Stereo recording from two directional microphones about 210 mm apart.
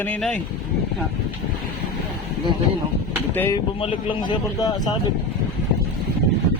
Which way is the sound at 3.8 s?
25° left (ahead or behind).